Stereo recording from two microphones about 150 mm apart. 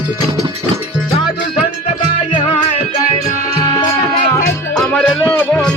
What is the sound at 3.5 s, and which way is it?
Music, 25° left (ahead or behind).